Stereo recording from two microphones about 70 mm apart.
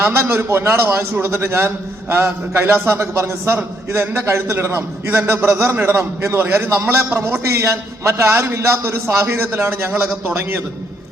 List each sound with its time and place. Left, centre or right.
0.0 s a man's voice: right